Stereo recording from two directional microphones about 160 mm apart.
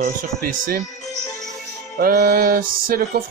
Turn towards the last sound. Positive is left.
turn(degrees=-65)  # may be behind; listen again after turning